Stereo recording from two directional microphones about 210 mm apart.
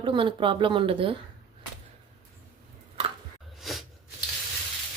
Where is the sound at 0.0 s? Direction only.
25° right (ahead or behind).